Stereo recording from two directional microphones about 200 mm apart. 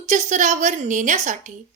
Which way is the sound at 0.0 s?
35° right (ahead or behind).